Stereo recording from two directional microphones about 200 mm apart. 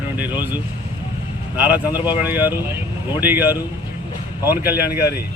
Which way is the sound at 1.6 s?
10° right (ahead or behind).